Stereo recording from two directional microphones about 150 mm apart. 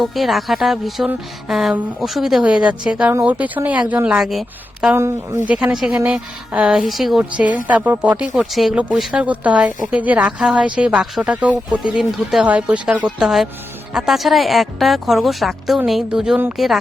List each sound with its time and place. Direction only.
0.0 s a woman's voice: centre (ahead or behind)
4.9 s speech: 20° right (ahead or behind)
5.5 s a woman's voice: 5° right (ahead or behind)